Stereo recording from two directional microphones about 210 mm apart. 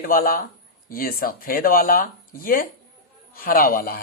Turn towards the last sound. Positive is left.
turn(degrees=45)  # may be behind; listen again after turning